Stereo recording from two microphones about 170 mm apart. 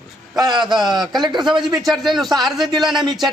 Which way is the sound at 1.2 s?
25° right (ahead or behind).